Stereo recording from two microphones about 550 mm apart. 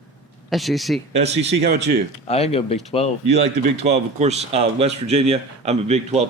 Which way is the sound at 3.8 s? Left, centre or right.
Centre.